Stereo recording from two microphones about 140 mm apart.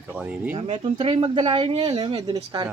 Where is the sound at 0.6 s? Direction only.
40° right (ahead or behind).